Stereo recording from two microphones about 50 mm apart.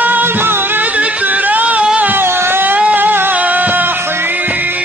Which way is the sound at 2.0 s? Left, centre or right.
Right.